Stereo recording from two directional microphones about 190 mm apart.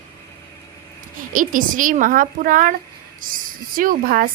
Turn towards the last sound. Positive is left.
turn(degrees=-50)  # may be behind; listen again after turning